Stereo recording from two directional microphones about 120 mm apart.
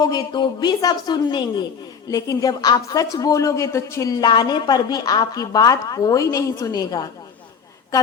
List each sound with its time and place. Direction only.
0.0 s speech: 35° left (ahead or behind)